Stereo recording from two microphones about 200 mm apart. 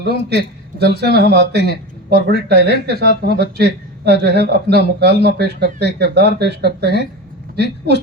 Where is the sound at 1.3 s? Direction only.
55° right (ahead or behind).